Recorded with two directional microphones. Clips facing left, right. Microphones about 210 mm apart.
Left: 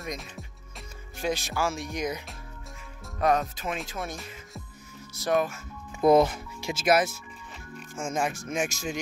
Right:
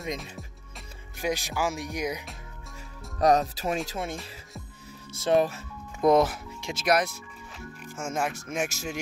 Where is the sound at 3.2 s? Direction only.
35° right (ahead or behind).